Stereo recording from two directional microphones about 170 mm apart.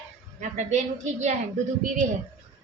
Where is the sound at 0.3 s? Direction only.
45° right (ahead or behind).